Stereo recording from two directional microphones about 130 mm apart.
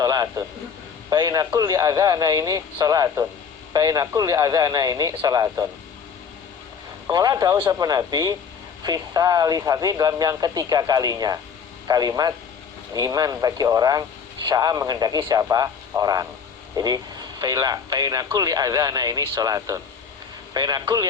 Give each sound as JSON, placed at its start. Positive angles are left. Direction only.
{"t": 0.0, "sound": "a sound", "side_deg": -30}
{"t": 1.1, "sound": "a man's voice", "side_deg": -30}
{"t": 7.1, "sound": "a man's voice", "side_deg": -30}